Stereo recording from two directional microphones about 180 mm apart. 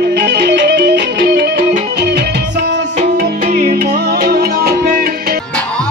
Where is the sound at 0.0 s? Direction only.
65° right (ahead or behind).